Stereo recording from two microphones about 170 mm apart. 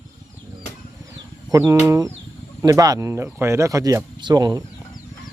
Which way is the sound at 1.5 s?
15° right (ahead or behind).